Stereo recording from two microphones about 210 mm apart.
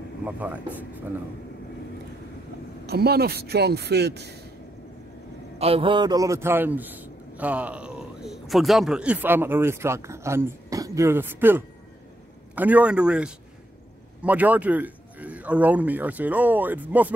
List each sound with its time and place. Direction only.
0.2 s speech: 5° right (ahead or behind)
2.9 s speech: 50° right (ahead or behind)
5.6 s a man's voice: 25° right (ahead or behind); by 17.1 s 10° right (ahead or behind)